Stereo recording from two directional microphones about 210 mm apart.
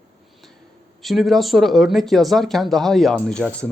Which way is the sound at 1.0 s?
Centre (ahead or behind).